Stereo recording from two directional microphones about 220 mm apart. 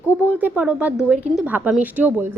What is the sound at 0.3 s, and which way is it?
A woman's voice, 5° right (ahead or behind).